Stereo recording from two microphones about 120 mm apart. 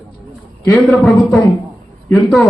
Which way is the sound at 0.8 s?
Centre (ahead or behind).